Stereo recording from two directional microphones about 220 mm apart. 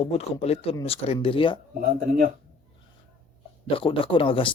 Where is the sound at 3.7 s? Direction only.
25° left (ahead or behind).